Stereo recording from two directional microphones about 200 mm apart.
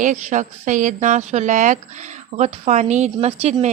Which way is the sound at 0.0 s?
40° right (ahead or behind).